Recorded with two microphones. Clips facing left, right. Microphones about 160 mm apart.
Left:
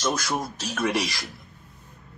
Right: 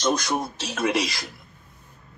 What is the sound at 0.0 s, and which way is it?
Speech, 20° right (ahead or behind).